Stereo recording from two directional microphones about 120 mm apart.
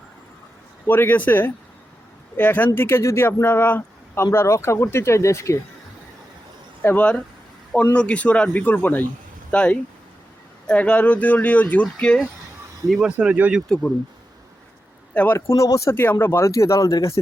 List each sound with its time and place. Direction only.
0.9 s speech: 15° left (ahead or behind)
6.8 s speech: 10° left (ahead or behind)
12.9 s speech: 5° right (ahead or behind)
15.1 s speech: 10° left (ahead or behind)
15.4 s speech: 25° left (ahead or behind)